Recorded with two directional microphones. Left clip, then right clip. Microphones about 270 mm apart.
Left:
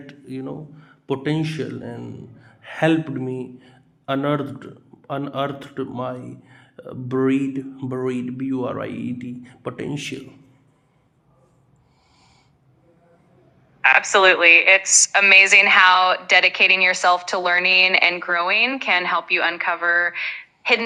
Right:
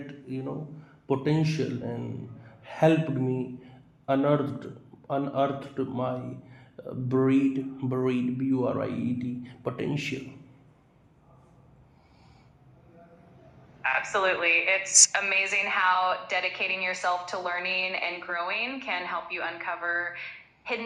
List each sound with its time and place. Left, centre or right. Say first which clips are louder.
0.1 s a sound: left 6 dB; left
1.0 s a man's voice: left 3 dB; left
13.8 s a woman's voice: left 12 dB; left
14.9 s a woman's voice: left 4 dB; centre
15.2 s a woman's voice: left 14 dB; left